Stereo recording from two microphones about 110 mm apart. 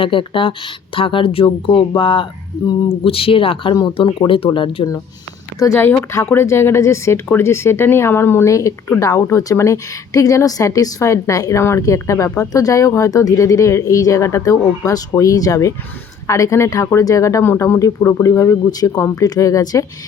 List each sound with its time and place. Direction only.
0.0 s speech: 50° left (ahead or behind)
5.5 s a woman's voice: 25° left (ahead or behind)